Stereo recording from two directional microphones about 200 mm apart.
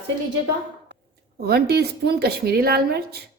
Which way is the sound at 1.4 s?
50° right (ahead or behind).